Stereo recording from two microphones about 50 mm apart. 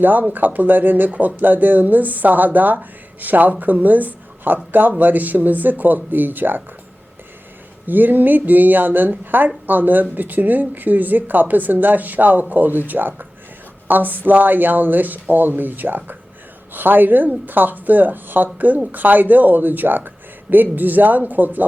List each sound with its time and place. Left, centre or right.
0.0 s speech: right
7.9 s speech: right